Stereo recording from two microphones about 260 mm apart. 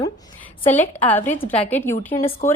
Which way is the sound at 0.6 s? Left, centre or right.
Centre.